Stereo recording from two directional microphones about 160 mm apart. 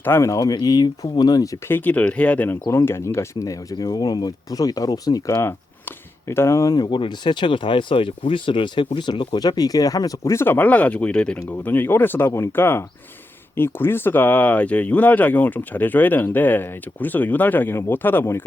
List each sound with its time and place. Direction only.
0.0 s speech: 15° left (ahead or behind)